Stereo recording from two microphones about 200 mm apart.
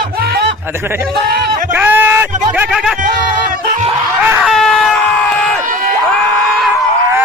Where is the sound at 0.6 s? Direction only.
10° right (ahead or behind).